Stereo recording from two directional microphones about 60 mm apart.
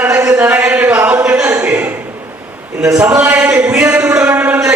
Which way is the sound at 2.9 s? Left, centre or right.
Centre.